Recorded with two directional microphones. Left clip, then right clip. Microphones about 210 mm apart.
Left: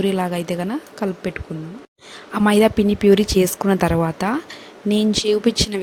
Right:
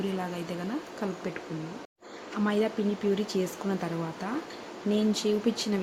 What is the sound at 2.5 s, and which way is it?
A woman's voice, 50° left (ahead or behind).